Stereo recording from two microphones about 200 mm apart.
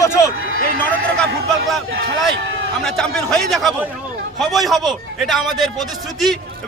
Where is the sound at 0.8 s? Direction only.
5° left (ahead or behind).